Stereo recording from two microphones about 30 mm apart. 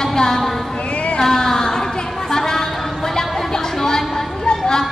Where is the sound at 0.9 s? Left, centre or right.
Left.